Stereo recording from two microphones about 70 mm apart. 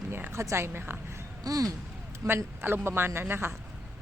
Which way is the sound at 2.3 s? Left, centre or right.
Right.